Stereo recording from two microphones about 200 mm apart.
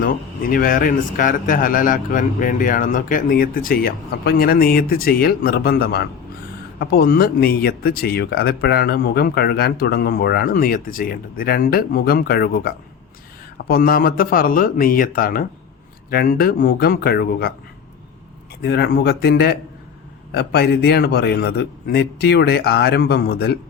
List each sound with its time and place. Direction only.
0.0 s speech: 45° left (ahead or behind)
18.6 s speech: 55° left (ahead or behind)